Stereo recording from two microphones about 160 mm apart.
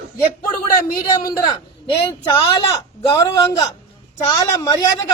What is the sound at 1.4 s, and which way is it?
A man's voice, 30° left (ahead or behind).